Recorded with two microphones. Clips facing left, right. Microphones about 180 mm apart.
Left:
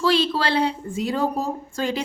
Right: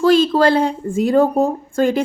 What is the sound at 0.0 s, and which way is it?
A woman's voice, 45° right (ahead or behind).